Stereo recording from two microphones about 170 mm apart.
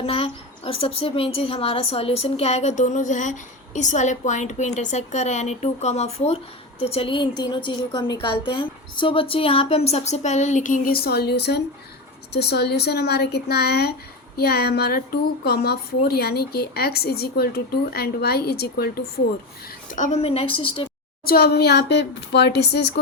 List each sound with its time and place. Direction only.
0.0 s a woman's voice: 35° left (ahead or behind); by 19.0 s 65° left (ahead or behind)
19.9 s a woman's voice: 45° left (ahead or behind)
21.2 s a woman's voice: 70° left (ahead or behind)